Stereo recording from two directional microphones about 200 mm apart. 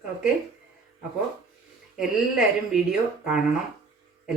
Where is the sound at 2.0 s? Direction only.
5° right (ahead or behind).